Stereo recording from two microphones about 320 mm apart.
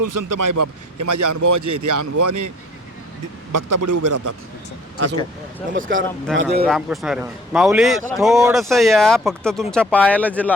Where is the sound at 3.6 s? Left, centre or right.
Right.